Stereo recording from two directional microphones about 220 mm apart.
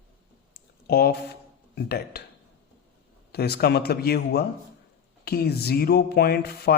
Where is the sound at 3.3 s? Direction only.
45° left (ahead or behind).